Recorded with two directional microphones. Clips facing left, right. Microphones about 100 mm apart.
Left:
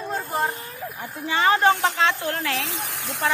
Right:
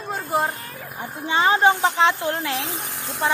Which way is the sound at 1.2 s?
25° right (ahead or behind).